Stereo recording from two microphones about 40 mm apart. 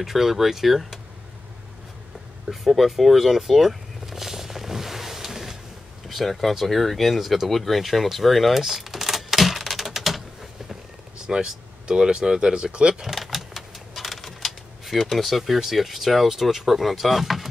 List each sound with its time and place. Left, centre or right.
0.0 s speech: centre
2.5 s vehicle: centre
6.0 s speech: centre
11.2 s speech: centre
13.0 s vehicle: centre